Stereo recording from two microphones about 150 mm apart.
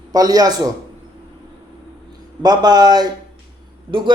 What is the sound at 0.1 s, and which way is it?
Speech, 25° right (ahead or behind).